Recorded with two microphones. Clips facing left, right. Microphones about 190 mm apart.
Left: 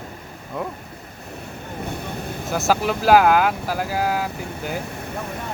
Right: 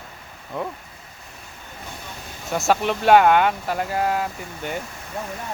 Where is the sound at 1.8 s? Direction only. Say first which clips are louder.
Left 8 dB; 60° left (ahead or behind).